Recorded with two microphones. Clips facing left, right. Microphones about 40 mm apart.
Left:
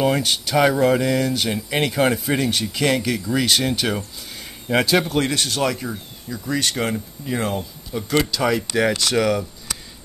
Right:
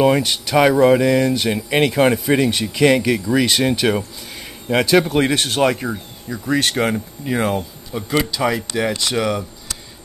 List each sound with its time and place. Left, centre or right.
0.0 s a man's voice: centre
5.0 s speech: centre
5.3 s speech: right; by 9.5 s centre